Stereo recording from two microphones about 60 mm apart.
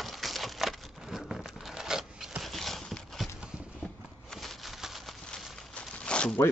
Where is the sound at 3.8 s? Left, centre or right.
Left.